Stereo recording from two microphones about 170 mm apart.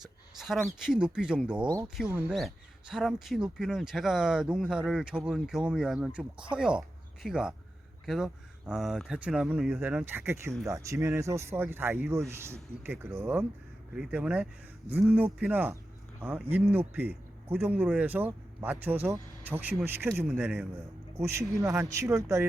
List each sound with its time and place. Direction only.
0.0 s speech: centre (ahead or behind)
1.6 s speech: 25° right (ahead or behind)
2.0 s speech: 10° right (ahead or behind)